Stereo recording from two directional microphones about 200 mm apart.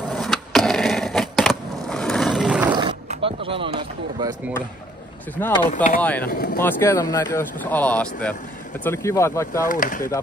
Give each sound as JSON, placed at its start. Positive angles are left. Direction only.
{"t": 0.1, "sound": "a sound", "side_deg": 0}
{"t": 2.7, "sound": "roaring cats", "side_deg": -25}
{"t": 3.1, "sound": "a sound", "side_deg": -25}
{"t": 5.4, "sound": "speech", "side_deg": 10}
{"t": 6.2, "sound": "speech", "side_deg": 50}
{"t": 6.6, "sound": "speech", "side_deg": 15}
{"t": 9.7, "sound": "speech", "side_deg": 40}